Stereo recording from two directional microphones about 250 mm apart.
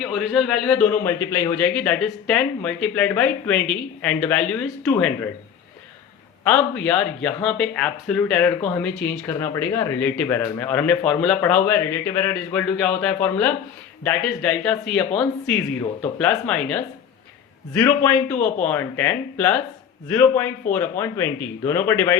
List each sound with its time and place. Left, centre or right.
0.0 s speech: centre
6.4 s speech: centre
18.3 s speech: left
18.6 s speech: centre